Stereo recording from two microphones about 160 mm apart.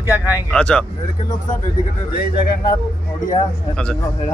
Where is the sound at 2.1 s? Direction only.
75° left (ahead or behind).